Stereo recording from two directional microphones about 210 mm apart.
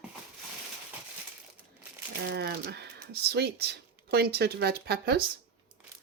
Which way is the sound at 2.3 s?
50° right (ahead or behind).